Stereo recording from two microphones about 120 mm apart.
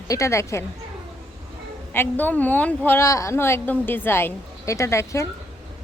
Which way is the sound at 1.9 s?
15° left (ahead or behind).